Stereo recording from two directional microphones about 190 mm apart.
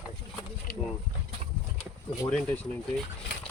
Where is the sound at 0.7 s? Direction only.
55° left (ahead or behind).